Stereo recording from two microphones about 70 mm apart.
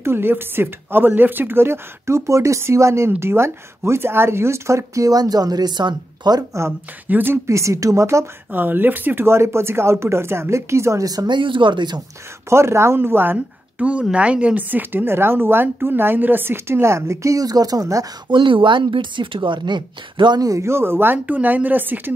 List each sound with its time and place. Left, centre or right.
0.0 s a woman's voice: right
7.1 s speech: right
7.4 s speech: right
8.5 s a woman's voice: right
11.1 s speech: right
12.4 s speech: right
14.1 s a woman's voice: centre; by 18.0 s right
19.2 s speech: right
20.6 s speech: right